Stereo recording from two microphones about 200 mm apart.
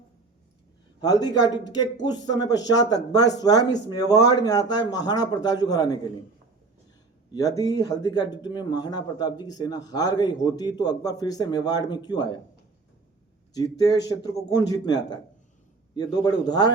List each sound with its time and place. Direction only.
1.0 s speech: 20° left (ahead or behind)
7.3 s speech: 20° left (ahead or behind)
13.5 s speech: 20° left (ahead or behind)